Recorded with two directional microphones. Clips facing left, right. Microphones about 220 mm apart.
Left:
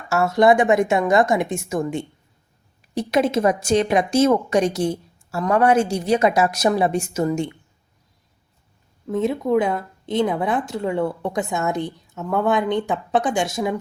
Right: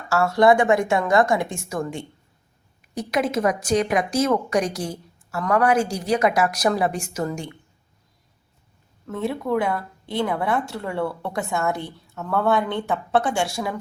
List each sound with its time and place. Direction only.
0.1 s speech: 20° left (ahead or behind)
9.0 s a woman's voice: 20° left (ahead or behind)